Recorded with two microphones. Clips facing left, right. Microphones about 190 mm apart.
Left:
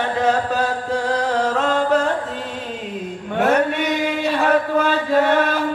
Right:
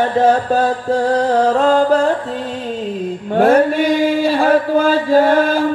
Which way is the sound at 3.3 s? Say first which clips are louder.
Right 6 dB; 30° right (ahead or behind).